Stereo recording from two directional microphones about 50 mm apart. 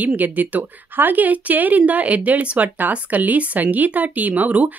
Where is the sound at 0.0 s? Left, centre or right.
Right.